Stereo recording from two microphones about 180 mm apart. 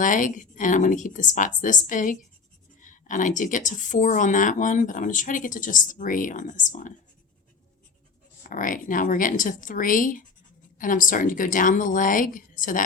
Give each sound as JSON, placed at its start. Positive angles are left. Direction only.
{"t": 0.0, "sound": "speech", "side_deg": 45}
{"t": 8.4, "sound": "speech", "side_deg": 45}